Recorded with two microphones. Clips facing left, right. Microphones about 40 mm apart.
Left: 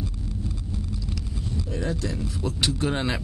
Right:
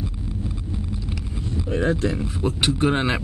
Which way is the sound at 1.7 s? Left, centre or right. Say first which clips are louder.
Right 8 dB; right.